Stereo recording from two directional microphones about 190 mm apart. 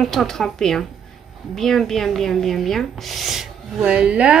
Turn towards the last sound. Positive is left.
turn(degrees=-5)  # may be behind; listen again after turning